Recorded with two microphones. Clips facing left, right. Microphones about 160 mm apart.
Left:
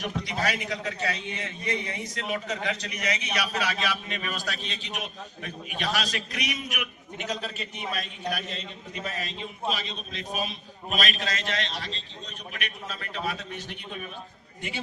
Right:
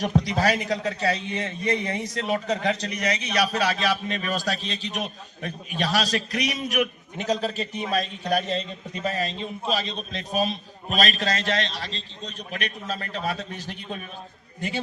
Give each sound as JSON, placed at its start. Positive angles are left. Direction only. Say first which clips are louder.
{"t": 0.0, "sound": "a man's voice", "louder": "right 7 dB", "side_deg": -35}